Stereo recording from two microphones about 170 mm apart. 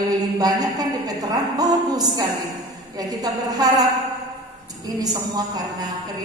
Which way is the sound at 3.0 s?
20° right (ahead or behind).